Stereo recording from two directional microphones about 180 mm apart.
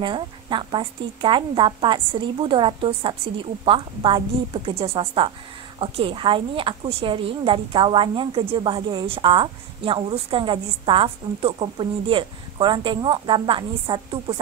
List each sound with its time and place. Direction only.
0.0 s a woman's voice: 25° right (ahead or behind)